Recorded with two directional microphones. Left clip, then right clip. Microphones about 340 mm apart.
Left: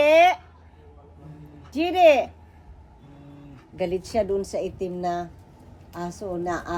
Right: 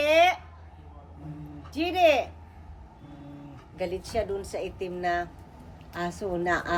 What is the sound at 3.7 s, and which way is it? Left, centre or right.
Speech, left.